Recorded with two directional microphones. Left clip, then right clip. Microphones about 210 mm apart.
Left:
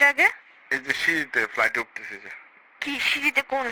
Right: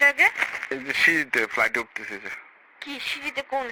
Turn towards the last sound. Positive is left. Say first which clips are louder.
# left 5 dB
turn(degrees=30)  # may be behind; listen again after turning